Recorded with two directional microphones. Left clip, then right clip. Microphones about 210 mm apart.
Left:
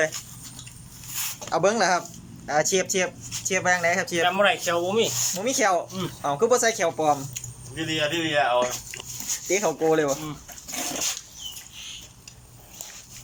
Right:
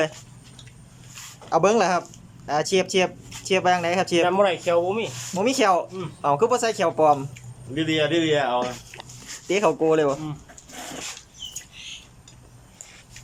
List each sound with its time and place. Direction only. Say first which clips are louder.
1.5 s speech: right 2 dB; 10° right (ahead or behind)
4.2 s speech: right 1 dB; 25° right (ahead or behind)
4.6 s speech: right 1 dB; 15° right (ahead or behind)
7.9 s a man's voice: right 4 dB; 35° right (ahead or behind)
8.6 s a sound: left 2 dB; 5° right (ahead or behind)
9.5 s speech: right 3 dB; 10° right (ahead or behind)